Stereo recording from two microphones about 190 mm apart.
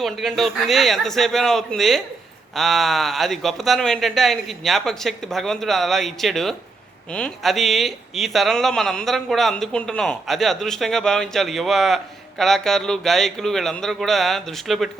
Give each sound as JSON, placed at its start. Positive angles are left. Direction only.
{"t": 0.0, "sound": "speech", "side_deg": 0}